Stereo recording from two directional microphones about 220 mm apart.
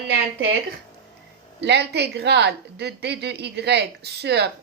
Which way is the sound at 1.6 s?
50° right (ahead or behind).